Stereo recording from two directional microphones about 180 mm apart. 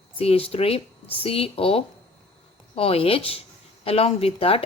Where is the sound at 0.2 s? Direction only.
30° left (ahead or behind).